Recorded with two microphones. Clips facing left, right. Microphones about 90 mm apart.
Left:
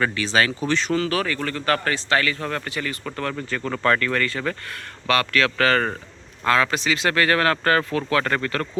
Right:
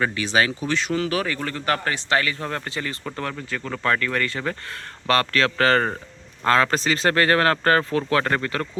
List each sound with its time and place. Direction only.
0.0 s speech: 15° right (ahead or behind)
0.7 s a man's voice: 5° right (ahead or behind); by 3.1 s 25° right (ahead or behind)
3.3 s speech: centre (ahead or behind); by 4.5 s 20° right (ahead or behind)
5.0 s speech: 35° right (ahead or behind)